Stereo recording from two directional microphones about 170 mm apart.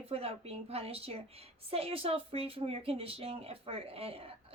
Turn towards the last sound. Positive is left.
turn(degrees=-35)  # may be behind; listen again after turning